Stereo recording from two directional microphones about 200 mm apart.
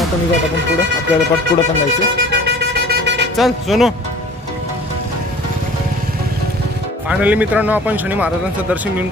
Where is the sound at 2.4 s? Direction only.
60° right (ahead or behind).